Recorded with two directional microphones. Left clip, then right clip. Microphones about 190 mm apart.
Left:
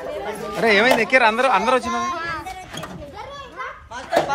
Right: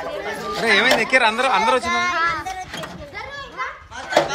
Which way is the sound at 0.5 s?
Centre (ahead or behind).